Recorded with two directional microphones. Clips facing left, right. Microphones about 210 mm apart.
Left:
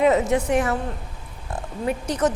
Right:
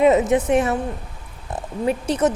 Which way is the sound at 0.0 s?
20° right (ahead or behind).